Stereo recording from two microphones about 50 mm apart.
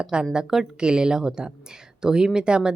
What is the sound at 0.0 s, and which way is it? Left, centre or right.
Speech, centre.